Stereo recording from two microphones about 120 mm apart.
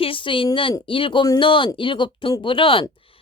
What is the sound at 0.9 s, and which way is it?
A woman's voice, 45° left (ahead or behind).